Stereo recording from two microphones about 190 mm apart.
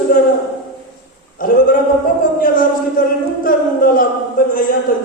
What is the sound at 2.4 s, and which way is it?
A man's voice, 45° left (ahead or behind).